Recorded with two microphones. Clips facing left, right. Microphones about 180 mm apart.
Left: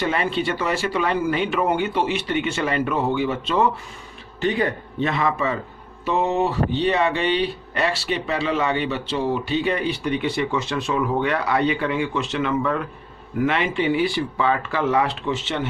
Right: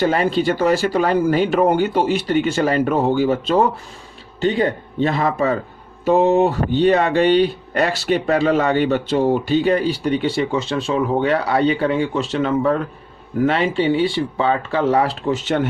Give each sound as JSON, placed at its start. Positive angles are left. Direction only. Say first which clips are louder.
{"t": 0.0, "sound": "speech", "louder": "right 6 dB", "side_deg": -40}
{"t": 4.4, "sound": "speech", "louder": "right 4 dB", "side_deg": -30}